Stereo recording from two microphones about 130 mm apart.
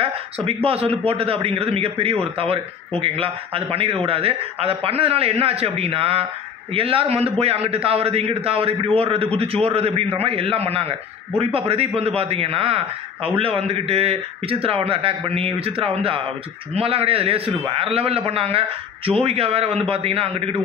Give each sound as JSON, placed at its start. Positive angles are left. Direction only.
{"t": 0.0, "sound": "a man's voice", "side_deg": -45}